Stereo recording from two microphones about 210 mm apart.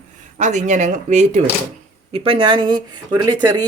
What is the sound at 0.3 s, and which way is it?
Speech, 35° right (ahead or behind).